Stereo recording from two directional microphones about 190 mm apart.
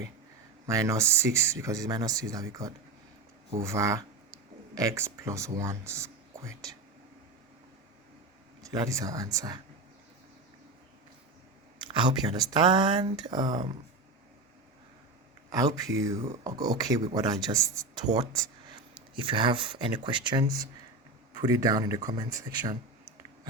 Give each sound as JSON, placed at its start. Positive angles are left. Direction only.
{"t": 0.7, "sound": "speech", "side_deg": -15}
{"t": 8.9, "sound": "speech", "side_deg": -15}
{"t": 11.9, "sound": "speech", "side_deg": -25}
{"t": 15.5, "sound": "speech", "side_deg": -20}